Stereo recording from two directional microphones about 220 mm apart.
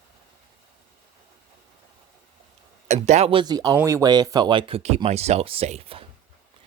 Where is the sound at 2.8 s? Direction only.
30° right (ahead or behind).